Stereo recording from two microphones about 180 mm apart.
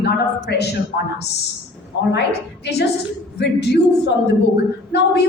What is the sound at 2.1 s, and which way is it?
Speech, 70° left (ahead or behind).